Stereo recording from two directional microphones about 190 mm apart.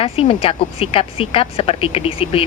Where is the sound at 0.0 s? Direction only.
30° left (ahead or behind).